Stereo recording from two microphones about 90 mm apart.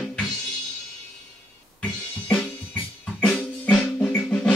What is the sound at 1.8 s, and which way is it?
Music, 10° left (ahead or behind).